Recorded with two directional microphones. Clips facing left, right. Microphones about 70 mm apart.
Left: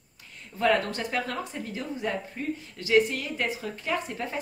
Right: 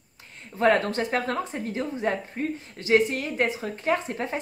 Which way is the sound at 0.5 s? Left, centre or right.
Right.